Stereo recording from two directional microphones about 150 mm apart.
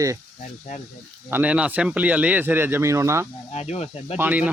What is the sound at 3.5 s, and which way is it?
Speech, 45° left (ahead or behind).